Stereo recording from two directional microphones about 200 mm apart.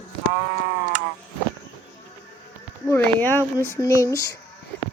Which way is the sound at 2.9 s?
10° left (ahead or behind).